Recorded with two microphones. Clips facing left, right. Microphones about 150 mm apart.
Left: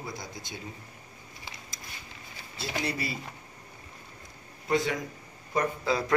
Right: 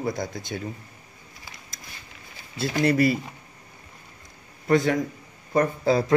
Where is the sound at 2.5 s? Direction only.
60° right (ahead or behind).